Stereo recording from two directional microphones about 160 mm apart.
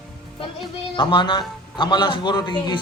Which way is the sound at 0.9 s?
30° left (ahead or behind).